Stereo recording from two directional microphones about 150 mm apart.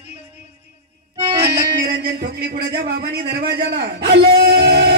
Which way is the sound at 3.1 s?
90° right.